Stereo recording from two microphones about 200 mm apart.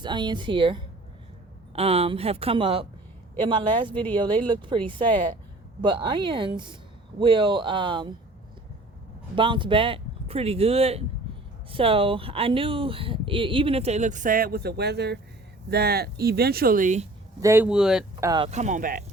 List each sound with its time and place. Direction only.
0.0 s speech: 20° right (ahead or behind)
9.3 s speech: 25° right (ahead or behind)
17.4 s speech: 10° right (ahead or behind)
18.2 s speech: 20° right (ahead or behind)
18.4 s speech: 35° right (ahead or behind)